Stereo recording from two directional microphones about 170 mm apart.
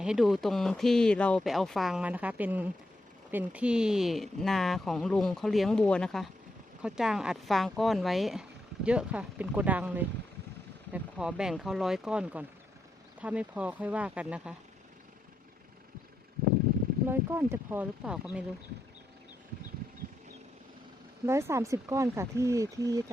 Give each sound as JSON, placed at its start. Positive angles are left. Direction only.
{"t": 0.0, "sound": "speech", "side_deg": -5}
{"t": 17.1, "sound": "speech", "side_deg": -15}
{"t": 21.2, "sound": "speech", "side_deg": -15}